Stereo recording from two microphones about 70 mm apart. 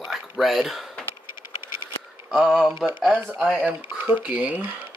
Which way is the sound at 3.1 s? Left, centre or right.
Right.